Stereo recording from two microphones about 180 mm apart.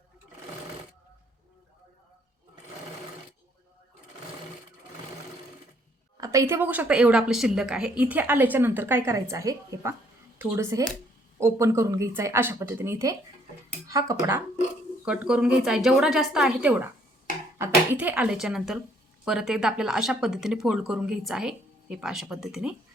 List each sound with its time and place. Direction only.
6.1 s a woman's voice: 20° right (ahead or behind)
15.0 s speech: 5° right (ahead or behind)